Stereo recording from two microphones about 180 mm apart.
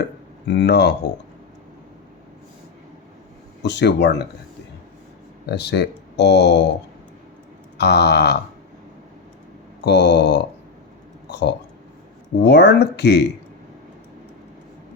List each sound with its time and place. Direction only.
0.4 s speech: 70° left (ahead or behind)
3.6 s speech: 70° left (ahead or behind)
5.5 s speech: 70° left (ahead or behind)
7.8 s a sound: 65° left (ahead or behind)
9.8 s speech: 70° left (ahead or behind)